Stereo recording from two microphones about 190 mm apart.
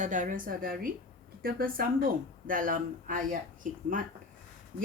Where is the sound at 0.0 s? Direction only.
40° right (ahead or behind).